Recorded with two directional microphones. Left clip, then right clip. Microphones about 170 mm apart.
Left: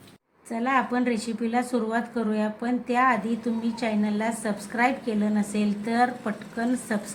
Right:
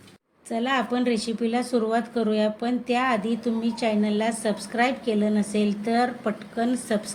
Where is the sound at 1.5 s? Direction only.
10° right (ahead or behind).